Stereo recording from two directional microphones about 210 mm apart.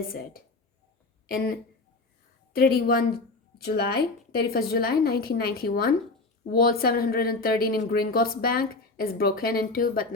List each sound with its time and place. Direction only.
2.6 s speech: 45° left (ahead or behind)